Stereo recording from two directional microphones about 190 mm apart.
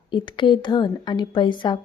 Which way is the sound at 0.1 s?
25° left (ahead or behind).